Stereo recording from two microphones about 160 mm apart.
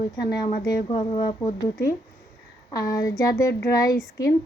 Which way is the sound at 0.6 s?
30° left (ahead or behind).